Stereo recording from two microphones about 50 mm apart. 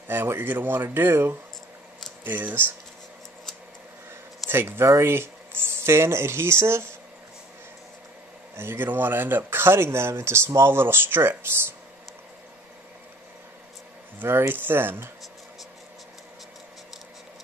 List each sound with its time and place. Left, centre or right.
0.1 s speech: right
2.2 s speech: right
4.5 s speech: right
4.8 s speech: right
5.1 s speech: right
8.5 s speech: right
14.5 s speech: right